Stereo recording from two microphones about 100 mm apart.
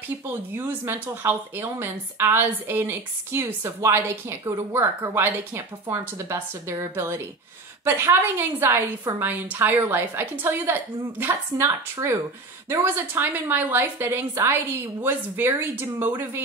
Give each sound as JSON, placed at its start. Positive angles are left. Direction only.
{"t": 0.5, "sound": "a woman's voice", "side_deg": -20}